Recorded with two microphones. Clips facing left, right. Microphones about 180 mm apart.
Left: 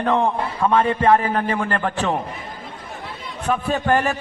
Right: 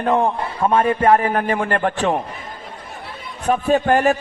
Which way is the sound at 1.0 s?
35° right (ahead or behind).